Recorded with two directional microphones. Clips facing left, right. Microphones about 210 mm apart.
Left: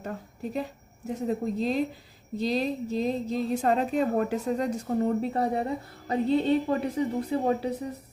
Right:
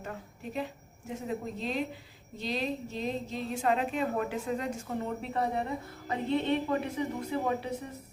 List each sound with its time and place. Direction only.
0.5 s a woman's voice: 40° left (ahead or behind)